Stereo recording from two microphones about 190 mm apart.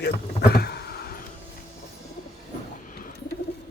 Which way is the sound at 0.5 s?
60° left (ahead or behind).